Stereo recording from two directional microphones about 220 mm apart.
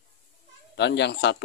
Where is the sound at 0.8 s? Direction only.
50° left (ahead or behind).